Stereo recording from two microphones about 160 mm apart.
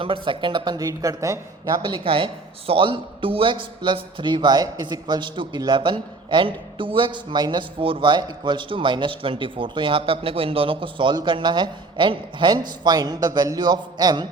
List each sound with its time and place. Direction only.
0.0 s a woman's voice: 30° right (ahead or behind)
1.8 s a woman's voice: 35° right (ahead or behind)